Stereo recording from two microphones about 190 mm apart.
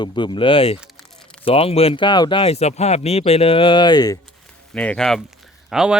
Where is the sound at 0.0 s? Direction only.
25° left (ahead or behind).